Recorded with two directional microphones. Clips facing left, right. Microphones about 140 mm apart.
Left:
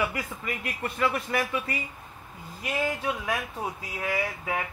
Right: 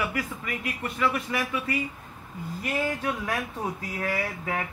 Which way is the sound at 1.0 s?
35° left (ahead or behind).